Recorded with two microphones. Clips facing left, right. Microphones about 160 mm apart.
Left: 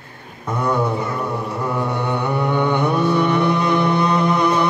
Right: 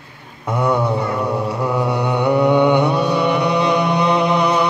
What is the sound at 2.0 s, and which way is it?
Mantra, 15° right (ahead or behind).